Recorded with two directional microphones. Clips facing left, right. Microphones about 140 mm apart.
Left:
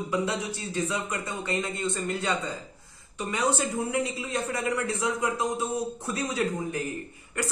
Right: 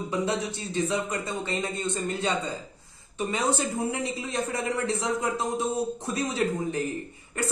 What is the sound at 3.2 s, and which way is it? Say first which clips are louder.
Speech: right 1 dB; 25° right (ahead or behind).